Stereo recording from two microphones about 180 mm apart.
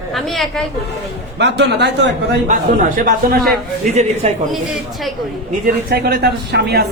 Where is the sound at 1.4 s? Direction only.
70° right (ahead or behind).